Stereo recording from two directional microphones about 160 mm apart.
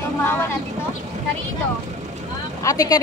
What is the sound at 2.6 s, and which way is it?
Speech, 20° left (ahead or behind).